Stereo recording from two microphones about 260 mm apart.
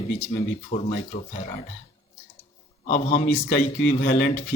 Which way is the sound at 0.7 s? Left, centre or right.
Left.